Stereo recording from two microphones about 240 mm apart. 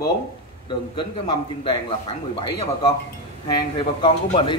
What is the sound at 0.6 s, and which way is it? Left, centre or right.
A man's voice, centre.